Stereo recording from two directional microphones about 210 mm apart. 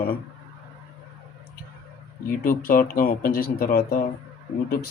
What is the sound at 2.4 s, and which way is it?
Speech, 45° left (ahead or behind).